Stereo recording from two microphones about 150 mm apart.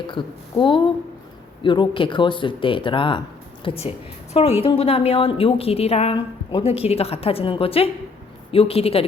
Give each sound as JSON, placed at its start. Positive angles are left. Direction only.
{"t": 0.1, "sound": "a woman's voice", "side_deg": 35}